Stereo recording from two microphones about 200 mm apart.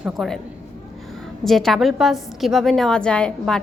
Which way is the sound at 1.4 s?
Centre (ahead or behind).